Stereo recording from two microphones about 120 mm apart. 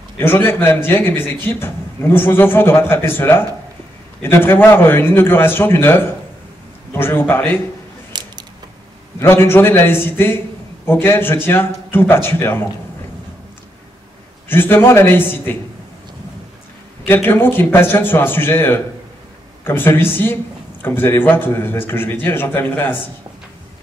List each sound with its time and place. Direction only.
0.2 s a man's voice: 20° left (ahead or behind)
8.1 s a sound: 35° right (ahead or behind)
9.2 s a man's voice: 20° left (ahead or behind)
14.5 s a man's voice: 20° left (ahead or behind)
17.0 s a man's voice: 20° left (ahead or behind)